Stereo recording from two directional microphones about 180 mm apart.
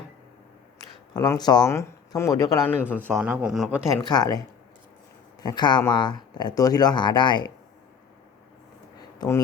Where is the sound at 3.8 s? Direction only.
20° left (ahead or behind).